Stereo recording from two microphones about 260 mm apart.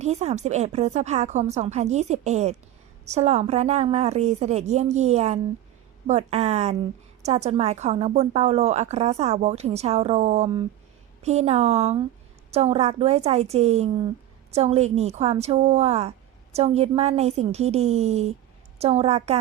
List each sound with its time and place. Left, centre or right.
0.0 s a woman's voice: right